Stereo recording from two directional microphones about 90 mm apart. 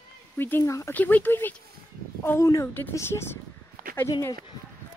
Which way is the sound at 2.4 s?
40° left (ahead or behind).